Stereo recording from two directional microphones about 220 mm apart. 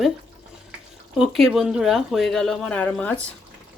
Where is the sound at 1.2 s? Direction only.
Centre (ahead or behind).